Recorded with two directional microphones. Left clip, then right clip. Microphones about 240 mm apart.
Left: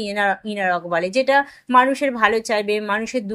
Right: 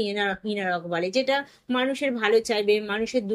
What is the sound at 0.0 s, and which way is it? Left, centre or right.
A woman's voice, centre.